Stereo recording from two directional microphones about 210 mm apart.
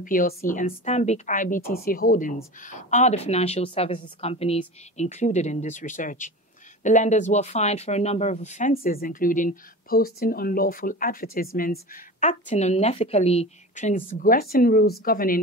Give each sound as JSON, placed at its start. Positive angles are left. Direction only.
{"t": 0.0, "sound": "a woman's voice", "side_deg": 40}